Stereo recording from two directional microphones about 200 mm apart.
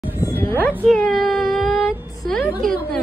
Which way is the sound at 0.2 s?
10° left (ahead or behind).